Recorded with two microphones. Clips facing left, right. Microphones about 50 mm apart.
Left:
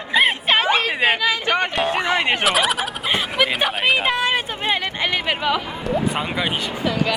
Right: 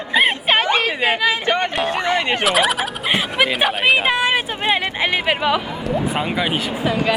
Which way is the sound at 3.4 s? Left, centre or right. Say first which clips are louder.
Right 3 dB; centre.